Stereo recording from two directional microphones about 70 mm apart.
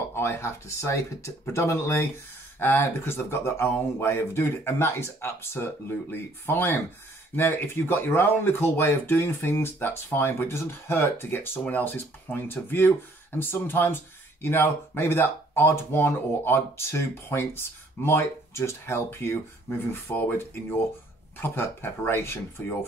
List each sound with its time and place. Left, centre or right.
0.1 s speech: left